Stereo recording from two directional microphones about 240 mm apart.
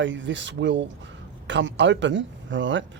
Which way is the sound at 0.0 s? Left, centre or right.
Right.